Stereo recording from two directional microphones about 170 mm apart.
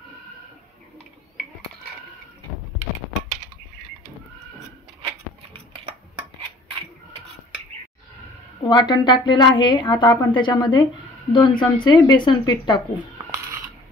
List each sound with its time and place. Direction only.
8.6 s a woman's voice: 25° left (ahead or behind)
13.3 s coin: 15° right (ahead or behind)